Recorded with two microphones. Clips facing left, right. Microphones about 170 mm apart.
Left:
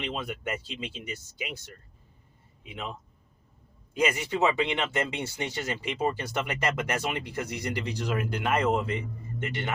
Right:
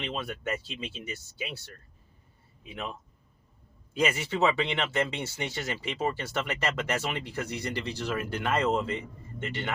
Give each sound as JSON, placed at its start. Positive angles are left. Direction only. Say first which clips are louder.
{"t": 0.0, "sound": "speech", "louder": "left 1 dB", "side_deg": 15}
{"t": 4.0, "sound": "speech", "louder": "left 1 dB", "side_deg": 15}